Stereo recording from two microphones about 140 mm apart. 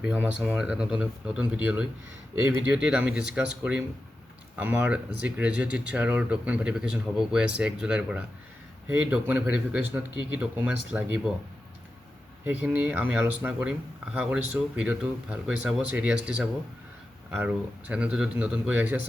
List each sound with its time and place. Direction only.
0.0 s speech: 10° right (ahead or behind)
2.7 s speech: 5° right (ahead or behind)
12.5 s speech: 10° right (ahead or behind)